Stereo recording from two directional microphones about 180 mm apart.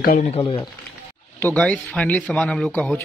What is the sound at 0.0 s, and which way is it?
Speech, 50° left (ahead or behind).